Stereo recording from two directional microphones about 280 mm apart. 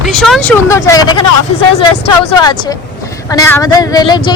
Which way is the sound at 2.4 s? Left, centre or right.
Centre.